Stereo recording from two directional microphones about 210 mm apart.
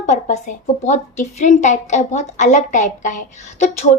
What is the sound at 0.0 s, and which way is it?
A woman's voice, 35° left (ahead or behind).